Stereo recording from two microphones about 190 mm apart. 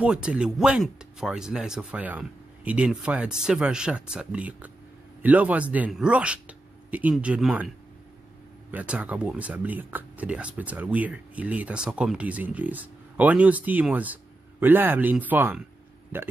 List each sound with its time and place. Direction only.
0.0 s speech: 5° right (ahead or behind)
8.7 s speech: 5° right (ahead or behind)